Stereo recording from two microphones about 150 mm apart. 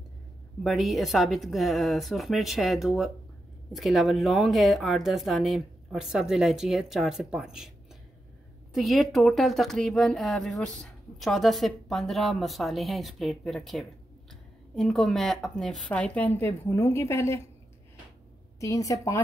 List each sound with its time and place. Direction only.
0.7 s speech: centre (ahead or behind)
8.7 s a woman's voice: centre (ahead or behind); by 17.4 s 20° left (ahead or behind)
18.6 s a woman's voice: 20° left (ahead or behind)